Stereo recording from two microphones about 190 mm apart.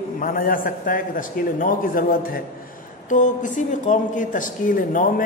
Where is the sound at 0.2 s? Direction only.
45° left (ahead or behind).